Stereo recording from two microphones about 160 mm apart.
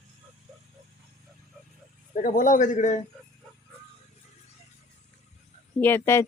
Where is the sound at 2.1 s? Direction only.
55° left (ahead or behind).